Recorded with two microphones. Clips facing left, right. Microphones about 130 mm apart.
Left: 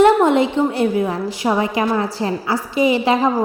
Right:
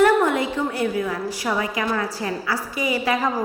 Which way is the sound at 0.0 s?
25° left (ahead or behind).